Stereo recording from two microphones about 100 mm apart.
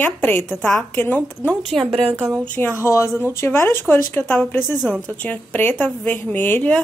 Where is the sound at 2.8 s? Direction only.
30° left (ahead or behind).